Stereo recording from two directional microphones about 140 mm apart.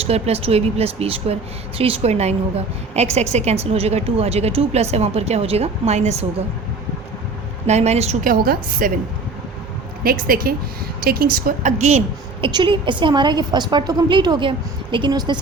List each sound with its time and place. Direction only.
0.0 s a woman's voice: 45° right (ahead or behind)
7.7 s a woman's voice: 50° right (ahead or behind)
8.2 s a woman's voice: 80° right
10.0 s a woman's voice: 90° right; by 12.0 s 55° right (ahead or behind)
12.4 s a woman's voice: 35° right (ahead or behind)